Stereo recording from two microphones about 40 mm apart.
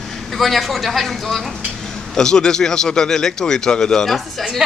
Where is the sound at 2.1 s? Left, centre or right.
Centre.